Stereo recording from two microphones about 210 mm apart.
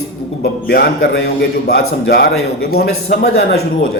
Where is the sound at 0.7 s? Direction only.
50° left (ahead or behind).